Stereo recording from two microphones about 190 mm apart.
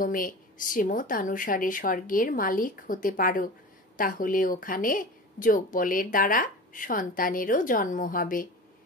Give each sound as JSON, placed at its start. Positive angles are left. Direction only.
{"t": 0.0, "sound": "a woman's voice", "side_deg": 45}